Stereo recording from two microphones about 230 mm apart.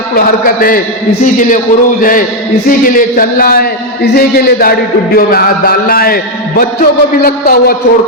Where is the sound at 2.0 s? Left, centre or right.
Left.